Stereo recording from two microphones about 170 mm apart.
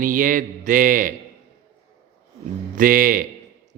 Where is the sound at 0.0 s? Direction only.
50° right (ahead or behind).